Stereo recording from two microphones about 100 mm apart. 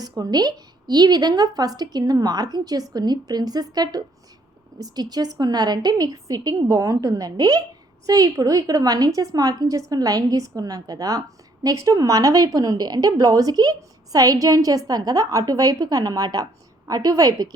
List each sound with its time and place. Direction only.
0.2 s a woman's voice: 45° right (ahead or behind)